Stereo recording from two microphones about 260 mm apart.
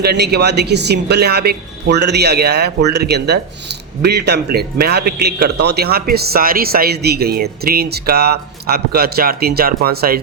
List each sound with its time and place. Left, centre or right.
0.0 s a man's voice: right